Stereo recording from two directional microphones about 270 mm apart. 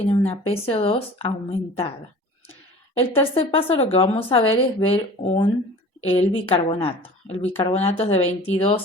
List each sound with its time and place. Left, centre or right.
0.0 s a woman's voice: left
3.3 s a woman's voice: left